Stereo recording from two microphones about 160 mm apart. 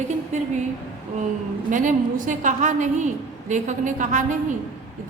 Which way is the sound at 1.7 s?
55° right (ahead or behind).